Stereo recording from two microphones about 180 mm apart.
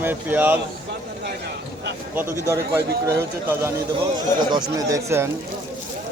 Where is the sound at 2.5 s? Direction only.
15° right (ahead or behind).